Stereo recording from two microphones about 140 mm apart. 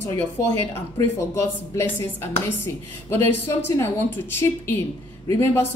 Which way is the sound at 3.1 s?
15° left (ahead or behind).